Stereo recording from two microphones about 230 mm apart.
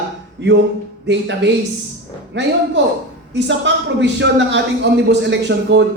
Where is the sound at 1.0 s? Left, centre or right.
Right.